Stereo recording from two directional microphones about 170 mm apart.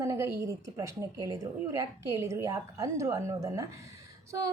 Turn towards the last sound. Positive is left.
turn(degrees=-20)  # may be behind; listen again after turning